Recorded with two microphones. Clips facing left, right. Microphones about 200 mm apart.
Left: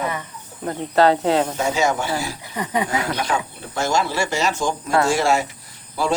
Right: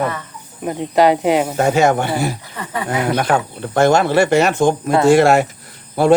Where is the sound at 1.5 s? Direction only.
60° right (ahead or behind).